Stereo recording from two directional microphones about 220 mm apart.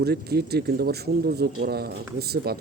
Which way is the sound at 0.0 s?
45° right (ahead or behind).